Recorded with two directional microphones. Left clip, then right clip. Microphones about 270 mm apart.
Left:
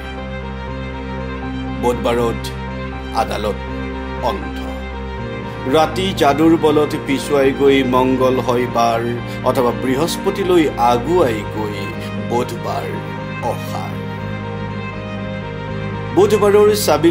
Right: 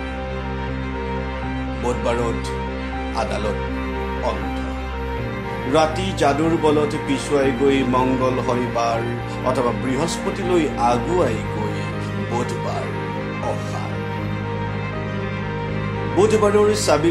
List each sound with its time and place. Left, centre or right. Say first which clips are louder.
5.7 s speech: left 4 dB; left
16.2 s speech: left 4 dB; left